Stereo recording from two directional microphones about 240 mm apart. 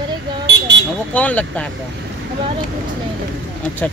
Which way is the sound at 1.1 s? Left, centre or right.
Centre.